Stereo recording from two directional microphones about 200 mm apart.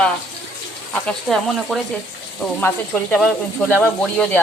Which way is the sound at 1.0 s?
Centre (ahead or behind).